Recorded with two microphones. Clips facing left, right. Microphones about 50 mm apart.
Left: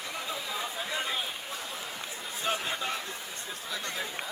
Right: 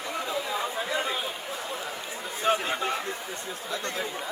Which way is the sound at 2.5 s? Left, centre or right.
Right.